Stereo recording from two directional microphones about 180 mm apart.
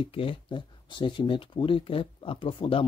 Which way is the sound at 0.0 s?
30° left (ahead or behind).